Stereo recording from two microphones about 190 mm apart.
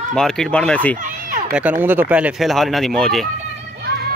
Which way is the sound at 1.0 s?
50° right (ahead or behind).